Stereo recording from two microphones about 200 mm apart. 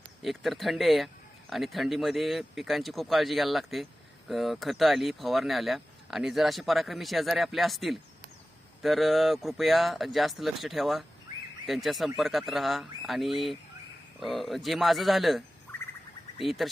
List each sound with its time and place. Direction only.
0.2 s speech: centre (ahead or behind)